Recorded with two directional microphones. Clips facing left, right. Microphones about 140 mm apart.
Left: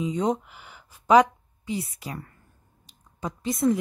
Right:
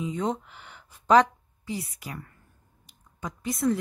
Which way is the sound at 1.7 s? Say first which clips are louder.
Left 3 dB; 25° left (ahead or behind).